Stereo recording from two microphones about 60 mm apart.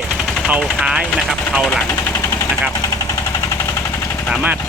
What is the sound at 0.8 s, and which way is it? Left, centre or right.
Speech, centre.